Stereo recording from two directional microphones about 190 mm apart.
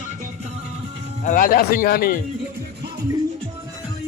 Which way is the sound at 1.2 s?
45° left (ahead or behind).